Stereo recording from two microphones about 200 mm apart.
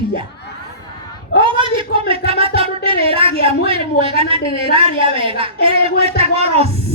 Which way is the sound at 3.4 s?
30° right (ahead or behind).